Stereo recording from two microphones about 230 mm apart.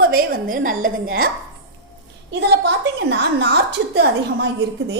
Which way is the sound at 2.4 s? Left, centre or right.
Right.